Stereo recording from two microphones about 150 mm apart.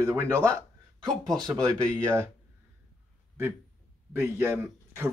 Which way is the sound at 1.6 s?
20° right (ahead or behind).